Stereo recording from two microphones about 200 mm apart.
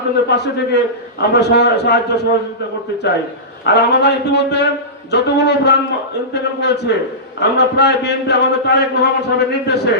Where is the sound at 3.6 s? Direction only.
55° left (ahead or behind).